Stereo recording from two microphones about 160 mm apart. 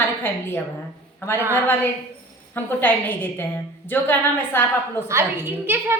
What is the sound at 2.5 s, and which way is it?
A woman's voice, 10° left (ahead or behind).